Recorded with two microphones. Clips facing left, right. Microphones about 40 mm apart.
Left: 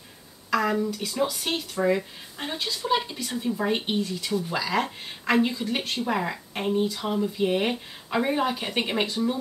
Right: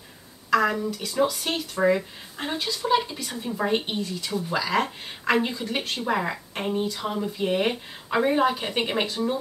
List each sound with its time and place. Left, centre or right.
0.7 s speech: centre